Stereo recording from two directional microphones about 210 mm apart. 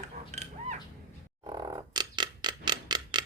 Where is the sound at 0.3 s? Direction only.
35° right (ahead or behind).